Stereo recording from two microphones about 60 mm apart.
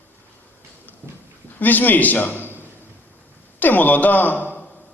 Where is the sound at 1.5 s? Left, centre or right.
Left.